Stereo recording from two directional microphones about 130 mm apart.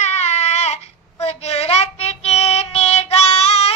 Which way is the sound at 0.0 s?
60° left (ahead or behind).